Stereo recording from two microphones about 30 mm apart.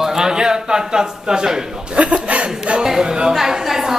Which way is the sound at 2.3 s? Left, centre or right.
Right.